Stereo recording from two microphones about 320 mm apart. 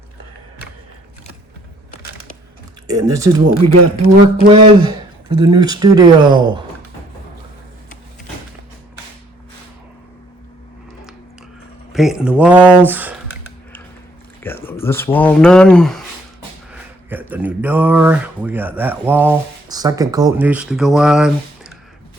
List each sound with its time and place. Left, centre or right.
2.8 s speech: centre
11.9 s speech: centre
14.4 s speech: centre